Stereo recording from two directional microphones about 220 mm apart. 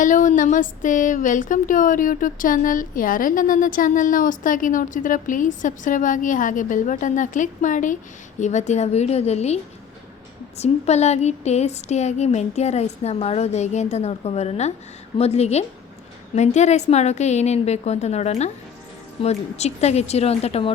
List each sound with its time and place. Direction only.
0.0 s a woman's voice: 35° left (ahead or behind)
10.6 s a woman's voice: 30° left (ahead or behind)